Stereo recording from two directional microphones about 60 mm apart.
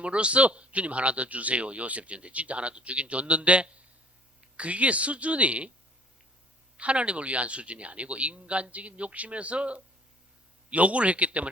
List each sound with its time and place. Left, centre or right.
0.0 s a man's voice: centre
6.7 s a man's voice: centre